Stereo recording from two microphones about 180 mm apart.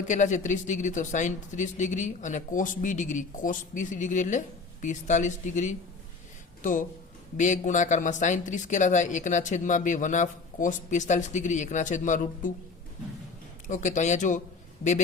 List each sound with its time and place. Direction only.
0.1 s speech: 45° left (ahead or behind)
13.7 s speech: 45° left (ahead or behind)